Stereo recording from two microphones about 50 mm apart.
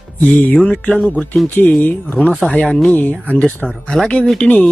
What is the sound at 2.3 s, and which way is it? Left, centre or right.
Speech, centre.